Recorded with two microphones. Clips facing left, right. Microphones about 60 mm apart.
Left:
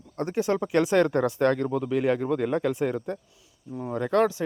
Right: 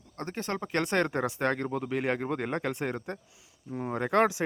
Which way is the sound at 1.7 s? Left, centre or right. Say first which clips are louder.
Left 5 dB; right.